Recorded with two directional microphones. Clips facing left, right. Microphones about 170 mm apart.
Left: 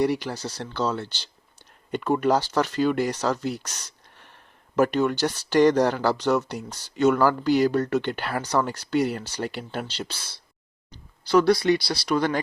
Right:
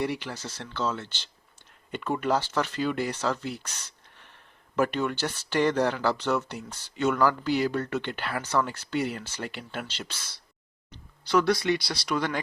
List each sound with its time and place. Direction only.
0.0 s speech: 40° left (ahead or behind)